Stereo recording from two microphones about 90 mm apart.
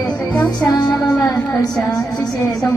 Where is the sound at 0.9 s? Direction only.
5° left (ahead or behind).